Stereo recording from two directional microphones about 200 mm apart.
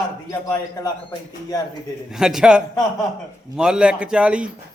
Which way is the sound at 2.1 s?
Centre (ahead or behind).